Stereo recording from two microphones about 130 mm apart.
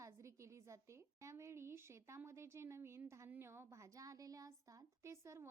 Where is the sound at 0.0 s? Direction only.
20° right (ahead or behind).